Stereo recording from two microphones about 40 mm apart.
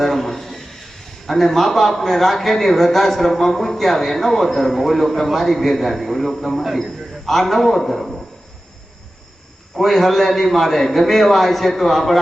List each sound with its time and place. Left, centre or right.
0.0 s a sound: centre
1.3 s a man's voice: centre
9.7 s a man's voice: centre